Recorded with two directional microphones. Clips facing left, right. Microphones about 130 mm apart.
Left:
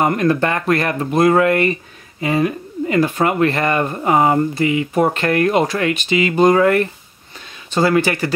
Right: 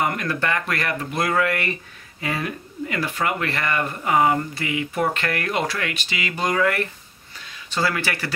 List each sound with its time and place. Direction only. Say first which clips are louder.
0.0 s speech: left 8 dB; 30° left (ahead or behind)